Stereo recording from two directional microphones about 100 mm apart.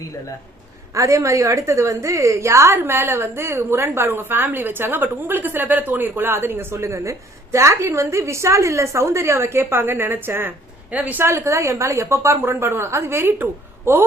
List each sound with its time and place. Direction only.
0.9 s a woman's voice: 35° right (ahead or behind)